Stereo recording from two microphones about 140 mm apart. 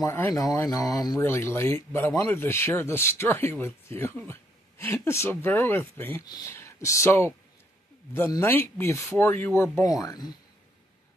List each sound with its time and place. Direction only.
0.0 s speech: 20° left (ahead or behind)
6.2 s speech: 30° left (ahead or behind)